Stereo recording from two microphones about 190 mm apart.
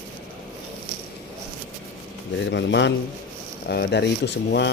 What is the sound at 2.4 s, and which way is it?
Speech, 70° left (ahead or behind).